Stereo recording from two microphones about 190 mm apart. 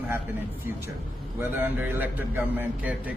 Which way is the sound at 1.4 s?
10° right (ahead or behind).